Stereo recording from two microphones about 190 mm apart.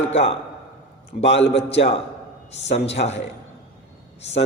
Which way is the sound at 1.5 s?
30° left (ahead or behind).